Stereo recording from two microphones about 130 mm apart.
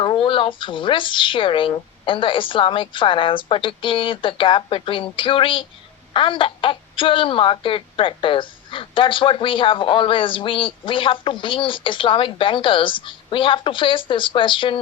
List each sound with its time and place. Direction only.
0.0 s a woman's voice: 40° left (ahead or behind)